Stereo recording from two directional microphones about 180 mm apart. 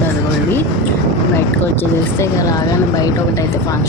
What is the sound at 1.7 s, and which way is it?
Speech, 15° left (ahead or behind).